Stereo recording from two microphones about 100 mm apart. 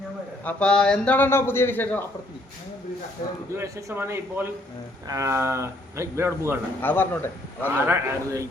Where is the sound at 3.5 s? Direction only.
30° right (ahead or behind).